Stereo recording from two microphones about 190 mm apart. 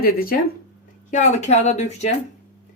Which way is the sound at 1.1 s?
40° left (ahead or behind).